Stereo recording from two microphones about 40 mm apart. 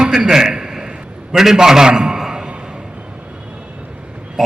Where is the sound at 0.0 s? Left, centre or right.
Centre.